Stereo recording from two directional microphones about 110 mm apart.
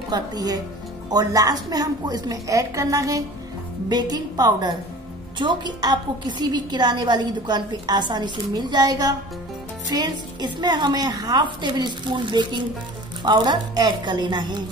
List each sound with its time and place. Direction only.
0.1 s a woman's voice: 35° right (ahead or behind)